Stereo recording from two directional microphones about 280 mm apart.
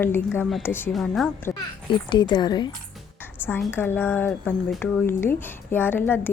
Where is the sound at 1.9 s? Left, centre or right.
Centre.